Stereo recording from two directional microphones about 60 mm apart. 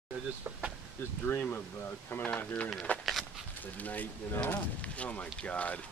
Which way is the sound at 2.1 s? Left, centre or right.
Left.